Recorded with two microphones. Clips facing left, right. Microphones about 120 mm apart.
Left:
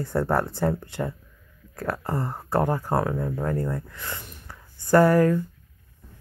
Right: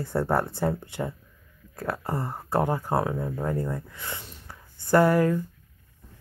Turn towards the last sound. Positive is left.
turn(degrees=-20)  # may be behind; listen again after turning